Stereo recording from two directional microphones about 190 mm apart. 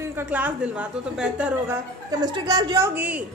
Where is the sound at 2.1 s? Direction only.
20° right (ahead or behind).